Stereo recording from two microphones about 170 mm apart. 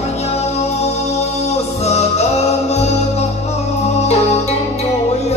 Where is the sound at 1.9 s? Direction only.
40° left (ahead or behind).